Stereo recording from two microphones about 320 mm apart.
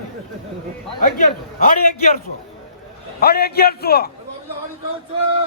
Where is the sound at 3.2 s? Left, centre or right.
Left.